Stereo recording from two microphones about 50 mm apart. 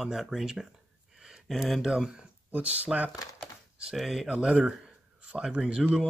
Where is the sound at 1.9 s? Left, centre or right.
Centre.